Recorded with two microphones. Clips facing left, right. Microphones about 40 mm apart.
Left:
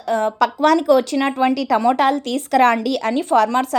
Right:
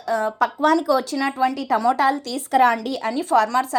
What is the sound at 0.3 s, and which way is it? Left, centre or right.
Speech, left.